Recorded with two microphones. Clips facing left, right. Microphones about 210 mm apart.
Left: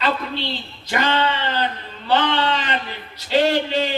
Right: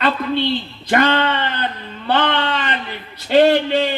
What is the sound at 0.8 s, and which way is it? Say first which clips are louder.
Speech: right 4 dB; 55° right (ahead or behind).